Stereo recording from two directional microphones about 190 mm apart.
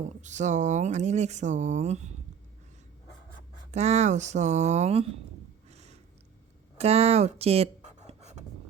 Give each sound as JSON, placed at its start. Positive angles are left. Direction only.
{"t": 0.2, "sound": "speech", "side_deg": -40}
{"t": 3.7, "sound": "speech", "side_deg": -35}
{"t": 5.6, "sound": "a sound", "side_deg": -35}
{"t": 6.7, "sound": "writing", "side_deg": -35}